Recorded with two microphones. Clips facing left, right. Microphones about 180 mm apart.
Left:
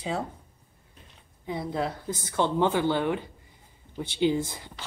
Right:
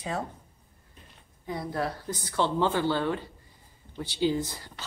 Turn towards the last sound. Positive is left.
turn(degrees=20)  # may be behind; listen again after turning